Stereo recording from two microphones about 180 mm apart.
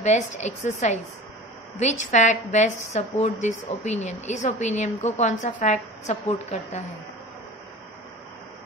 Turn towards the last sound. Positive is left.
turn(degrees=40)  # may be behind; listen again after turning